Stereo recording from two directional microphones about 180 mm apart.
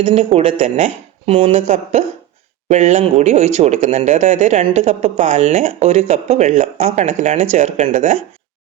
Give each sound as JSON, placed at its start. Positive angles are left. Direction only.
{"t": 0.0, "sound": "speech", "side_deg": -35}